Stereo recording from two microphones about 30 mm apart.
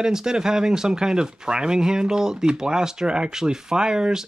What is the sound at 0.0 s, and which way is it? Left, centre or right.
Speech, right.